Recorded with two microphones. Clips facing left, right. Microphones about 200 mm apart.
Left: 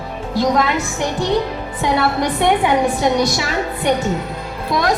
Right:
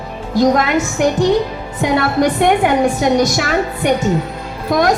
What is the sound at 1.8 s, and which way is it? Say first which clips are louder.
A woman's voice: right 3 dB; 50° right (ahead or behind).